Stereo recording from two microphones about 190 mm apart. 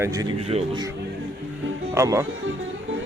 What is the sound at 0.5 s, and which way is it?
Speech, 35° right (ahead or behind).